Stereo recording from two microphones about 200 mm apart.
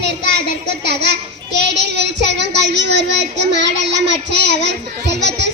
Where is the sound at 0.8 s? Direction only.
55° right (ahead or behind).